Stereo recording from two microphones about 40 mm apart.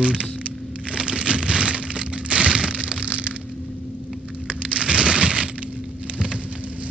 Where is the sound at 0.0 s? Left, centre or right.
Right.